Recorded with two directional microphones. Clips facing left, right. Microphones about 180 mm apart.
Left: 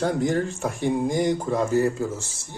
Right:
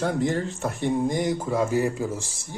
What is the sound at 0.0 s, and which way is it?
Speech, centre (ahead or behind).